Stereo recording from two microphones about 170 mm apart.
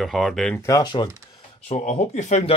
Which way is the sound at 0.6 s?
25° left (ahead or behind).